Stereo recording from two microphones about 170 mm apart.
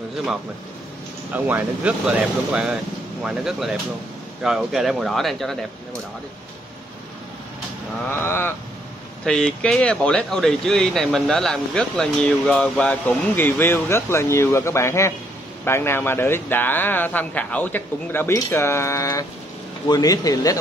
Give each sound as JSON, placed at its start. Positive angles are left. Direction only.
{"t": 1.3, "sound": "speech", "side_deg": -10}
{"t": 8.1, "sound": "a man's voice", "side_deg": 15}